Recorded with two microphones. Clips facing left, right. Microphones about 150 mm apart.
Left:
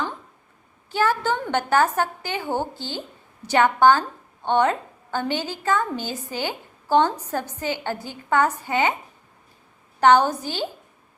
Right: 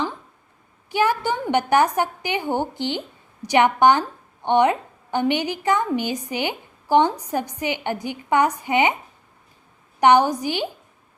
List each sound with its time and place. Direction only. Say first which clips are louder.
0.9 s a woman's voice: right 1 dB; 15° right (ahead or behind)
10.0 s a woman's voice: right 1 dB; 15° right (ahead or behind)